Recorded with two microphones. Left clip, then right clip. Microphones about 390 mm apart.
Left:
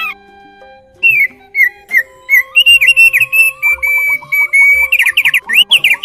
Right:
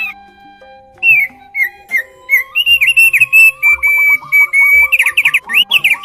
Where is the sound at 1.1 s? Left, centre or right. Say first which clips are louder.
Left 2 dB; centre.